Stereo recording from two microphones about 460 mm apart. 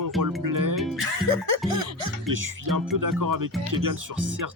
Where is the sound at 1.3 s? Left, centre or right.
Right.